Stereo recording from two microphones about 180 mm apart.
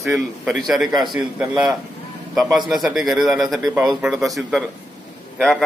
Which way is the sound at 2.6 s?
Centre (ahead or behind).